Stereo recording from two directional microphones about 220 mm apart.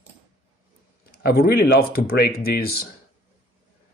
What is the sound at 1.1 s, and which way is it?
Speech, 45° left (ahead or behind).